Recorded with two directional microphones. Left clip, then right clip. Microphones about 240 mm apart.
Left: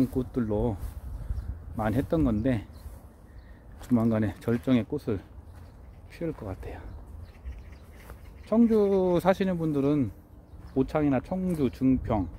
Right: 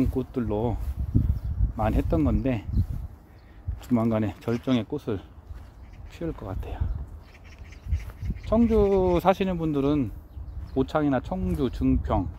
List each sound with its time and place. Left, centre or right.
0.1 s speech: centre
1.8 s speech: centre
3.8 s speech: centre
8.5 s speech: centre